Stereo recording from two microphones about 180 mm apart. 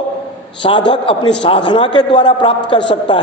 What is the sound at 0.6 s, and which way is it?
A man's voice, 25° left (ahead or behind).